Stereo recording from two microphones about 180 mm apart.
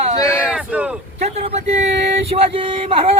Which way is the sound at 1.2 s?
35° right (ahead or behind).